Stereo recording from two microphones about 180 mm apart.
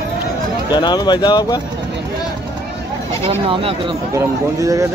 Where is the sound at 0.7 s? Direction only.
25° left (ahead or behind).